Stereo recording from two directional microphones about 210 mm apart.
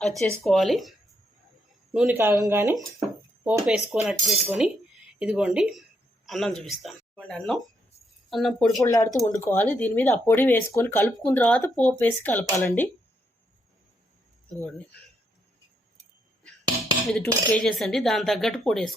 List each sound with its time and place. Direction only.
0.0 s speech: centre (ahead or behind)
2.1 s speech: 10° right (ahead or behind)
3.2 s a sound: 10° right (ahead or behind)
3.9 s speech: centre (ahead or behind)
8.8 s speech: 15° left (ahead or behind)
14.6 s speech: 5° left (ahead or behind)
17.1 s speech: 5° left (ahead or behind)